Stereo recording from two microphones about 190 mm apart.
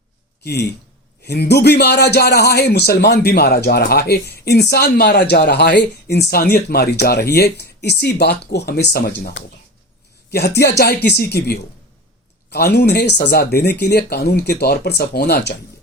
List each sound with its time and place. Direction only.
0.4 s a man's voice: 60° left (ahead or behind)
12.5 s a man's voice: 60° left (ahead or behind)